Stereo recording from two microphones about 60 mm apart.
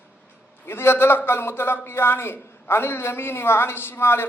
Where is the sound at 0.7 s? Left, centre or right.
Left.